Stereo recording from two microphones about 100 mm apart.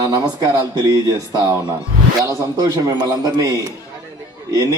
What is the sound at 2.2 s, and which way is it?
A man's voice, 35° right (ahead or behind).